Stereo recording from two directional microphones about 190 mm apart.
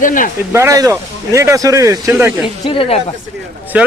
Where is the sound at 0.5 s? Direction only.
15° right (ahead or behind).